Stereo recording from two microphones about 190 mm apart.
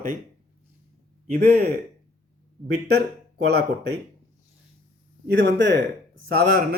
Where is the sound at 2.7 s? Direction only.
60° right (ahead or behind).